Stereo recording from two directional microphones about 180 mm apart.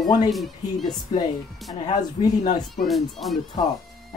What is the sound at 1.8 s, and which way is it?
Speech, 25° left (ahead or behind).